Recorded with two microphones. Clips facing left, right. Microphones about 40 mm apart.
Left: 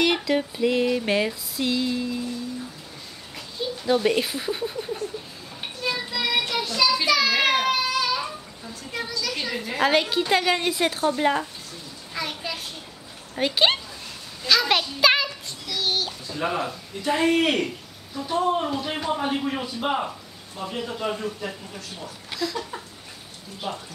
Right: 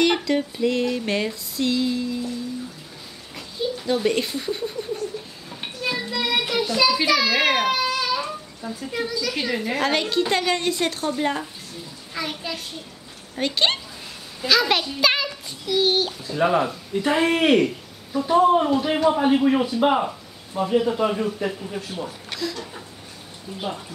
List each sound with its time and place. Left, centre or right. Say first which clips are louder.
0.0 s music: right 2 dB; centre
3.3 s speech: right 4 dB; centre
5.6 s child singing: right 1 dB; centre
8.9 s music: right 3 dB; centre
9.8 s a woman's voice: left 3 dB; centre
15.6 s a child's voice: right 6 dB; centre
16.1 s speech: right 6 dB; centre
18.1 s music: right 8 dB; centre
18.6 s a child's voice: right 7 dB; centre
22.4 s music: left 2 dB; centre